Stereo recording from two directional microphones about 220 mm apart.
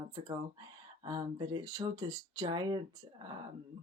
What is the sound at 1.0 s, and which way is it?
Speech, 20° right (ahead or behind).